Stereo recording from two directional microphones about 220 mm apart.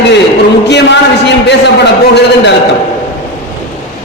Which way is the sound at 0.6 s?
50° left (ahead or behind).